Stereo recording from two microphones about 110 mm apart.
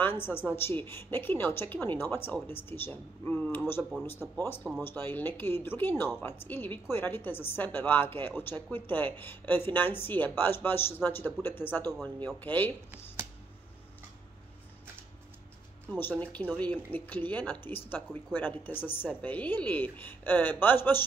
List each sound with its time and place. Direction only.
0.0 s a woman's voice: 20° left (ahead or behind)
12.9 s a sound: 25° right (ahead or behind)
15.9 s a woman's voice: 15° left (ahead or behind)